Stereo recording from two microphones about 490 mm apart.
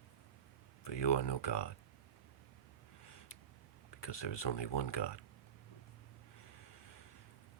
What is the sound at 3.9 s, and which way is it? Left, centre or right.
Speech, left.